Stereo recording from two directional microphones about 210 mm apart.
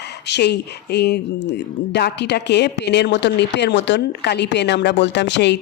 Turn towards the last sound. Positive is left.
turn(degrees=55)  # may be behind; listen again after turning